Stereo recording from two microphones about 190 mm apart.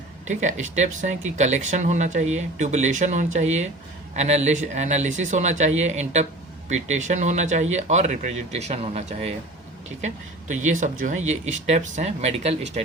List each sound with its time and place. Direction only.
0.3 s speech: 40° right (ahead or behind)
10.5 s speech: 40° right (ahead or behind)